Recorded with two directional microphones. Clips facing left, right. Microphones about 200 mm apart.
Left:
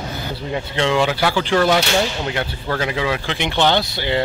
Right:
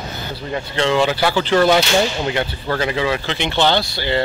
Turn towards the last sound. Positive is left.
turn(degrees=15)  # may be behind; listen again after turning